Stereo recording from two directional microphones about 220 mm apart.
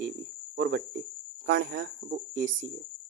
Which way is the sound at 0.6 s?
50° right (ahead or behind).